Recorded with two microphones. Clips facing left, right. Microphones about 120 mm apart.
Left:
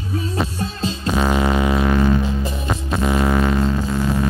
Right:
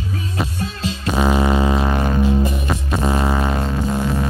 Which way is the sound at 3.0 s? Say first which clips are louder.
Left 2 dB; 20° right (ahead or behind).